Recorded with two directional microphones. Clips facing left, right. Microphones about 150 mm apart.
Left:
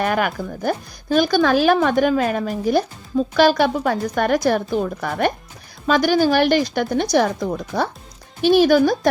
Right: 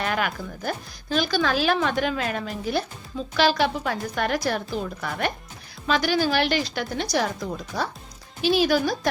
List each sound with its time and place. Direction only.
0.0 s speech: 50° left (ahead or behind)